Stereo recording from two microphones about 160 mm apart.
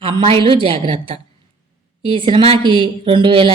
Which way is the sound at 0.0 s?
35° right (ahead or behind).